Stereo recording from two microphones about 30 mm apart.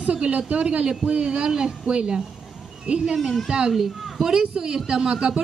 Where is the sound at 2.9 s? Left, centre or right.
Right.